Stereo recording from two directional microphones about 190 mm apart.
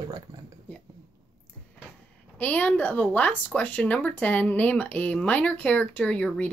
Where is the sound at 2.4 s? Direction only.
10° left (ahead or behind).